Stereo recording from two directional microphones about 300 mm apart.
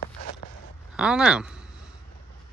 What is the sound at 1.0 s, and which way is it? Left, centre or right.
Speech, centre.